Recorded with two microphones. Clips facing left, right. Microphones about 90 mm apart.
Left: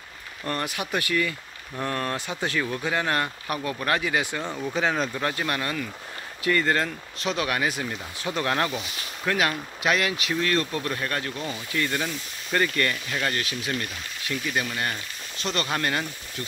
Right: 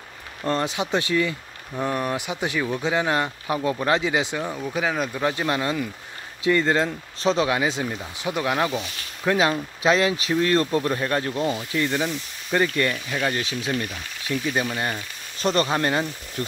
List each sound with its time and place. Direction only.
0.4 s speech: 25° right (ahead or behind); by 5.3 s 10° right (ahead or behind)
5.3 s speech: 20° right (ahead or behind)
9.2 s speech: 20° right (ahead or behind)
15.4 s speech: 35° right (ahead or behind)
15.7 s speech: 25° right (ahead or behind)